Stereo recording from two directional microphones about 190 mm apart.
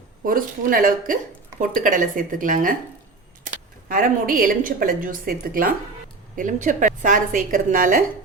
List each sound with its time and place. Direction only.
0.3 s a woman's voice: 50° right (ahead or behind)
3.8 s a woman's voice: 45° right (ahead or behind)